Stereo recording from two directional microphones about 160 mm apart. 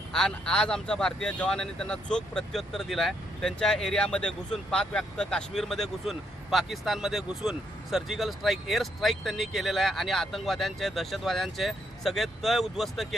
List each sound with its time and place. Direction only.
0.1 s a man's voice: 5° left (ahead or behind)